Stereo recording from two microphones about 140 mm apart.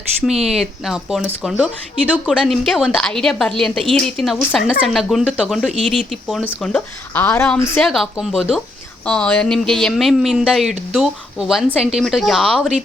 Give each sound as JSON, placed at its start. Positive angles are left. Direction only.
{"t": 0.2, "sound": "a woman's voice", "side_deg": 0}
{"t": 6.4, "sound": "speech", "side_deg": 10}
{"t": 7.8, "sound": "a woman's voice", "side_deg": 0}